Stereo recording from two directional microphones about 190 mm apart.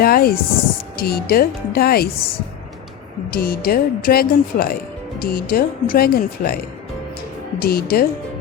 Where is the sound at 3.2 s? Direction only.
50° left (ahead or behind).